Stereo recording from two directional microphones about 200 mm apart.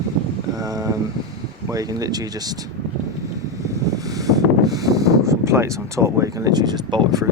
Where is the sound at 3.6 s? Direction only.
15° right (ahead or behind).